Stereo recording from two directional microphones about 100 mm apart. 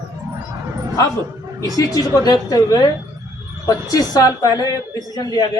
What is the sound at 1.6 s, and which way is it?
Speech, 35° left (ahead or behind).